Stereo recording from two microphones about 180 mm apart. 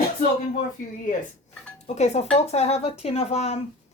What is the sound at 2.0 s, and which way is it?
Speech, 40° left (ahead or behind).